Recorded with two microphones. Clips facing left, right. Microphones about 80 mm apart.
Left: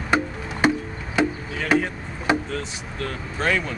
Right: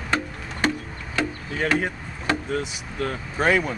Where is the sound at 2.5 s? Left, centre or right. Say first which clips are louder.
Right 2 dB; centre.